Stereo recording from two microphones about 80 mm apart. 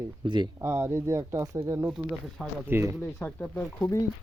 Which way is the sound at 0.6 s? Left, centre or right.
Right.